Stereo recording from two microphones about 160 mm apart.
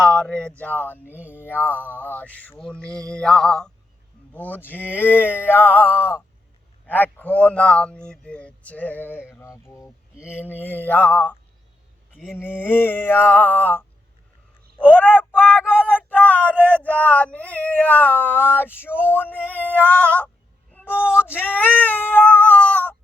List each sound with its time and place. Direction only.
0.0 s speech: 5° left (ahead or behind)
1.1 s a sound: 10° right (ahead or behind)
1.5 s speech: 10° left (ahead or behind)
14.8 s speech: 10° left (ahead or behind)
15.4 s speech: 5° right (ahead or behind)
16.0 s speech: 10° left (ahead or behind)
20.7 s a sound: 10° left (ahead or behind)
21.0 s a sound: 10° right (ahead or behind)
21.3 s speech: 10° left (ahead or behind)
21.8 s cat: 10° left (ahead or behind)